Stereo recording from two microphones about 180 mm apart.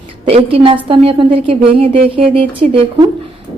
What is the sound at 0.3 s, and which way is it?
A woman's voice, 35° right (ahead or behind).